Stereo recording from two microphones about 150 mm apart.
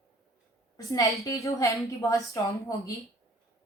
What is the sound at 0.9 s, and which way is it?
A woman's voice, 20° left (ahead or behind).